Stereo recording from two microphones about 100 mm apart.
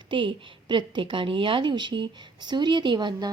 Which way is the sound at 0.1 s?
60° right (ahead or behind).